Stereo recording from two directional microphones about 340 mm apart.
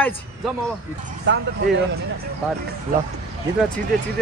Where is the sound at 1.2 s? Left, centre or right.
Right.